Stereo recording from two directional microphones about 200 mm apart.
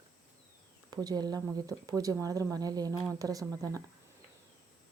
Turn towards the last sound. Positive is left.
turn(degrees=-15)  # may be behind; listen again after turning